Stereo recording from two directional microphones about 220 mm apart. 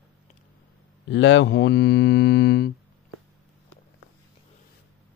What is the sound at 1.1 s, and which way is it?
Mantra, 55° left (ahead or behind).